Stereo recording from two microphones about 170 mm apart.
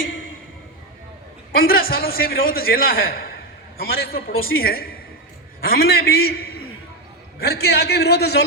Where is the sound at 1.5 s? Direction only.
60° left (ahead or behind).